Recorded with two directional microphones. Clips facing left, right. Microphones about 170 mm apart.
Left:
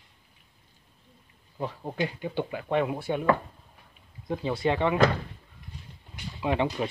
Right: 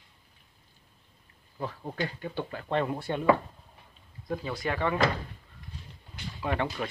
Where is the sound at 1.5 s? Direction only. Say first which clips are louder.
Left 3 dB; 15° left (ahead or behind).